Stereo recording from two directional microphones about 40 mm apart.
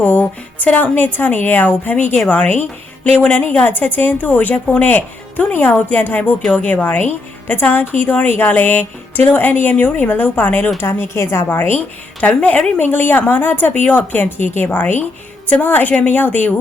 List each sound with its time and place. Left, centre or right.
0.0 s a woman's voice: left
8.3 s a sound: left
9.7 s a woman's voice: left
10.8 s speech: left
12.2 s speech: left
12.7 s a sound: left
13.1 s a woman's voice: left